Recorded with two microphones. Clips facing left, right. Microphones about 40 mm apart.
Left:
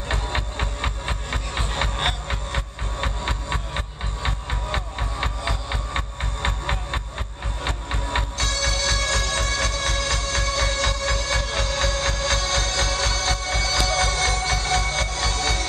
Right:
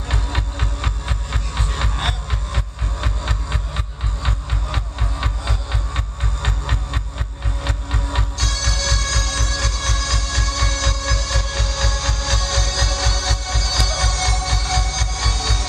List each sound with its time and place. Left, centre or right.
0.1 s music: left
4.7 s music: left
5.9 s music: left